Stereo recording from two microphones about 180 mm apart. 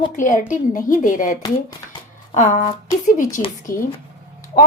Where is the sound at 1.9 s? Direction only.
45° left (ahead or behind).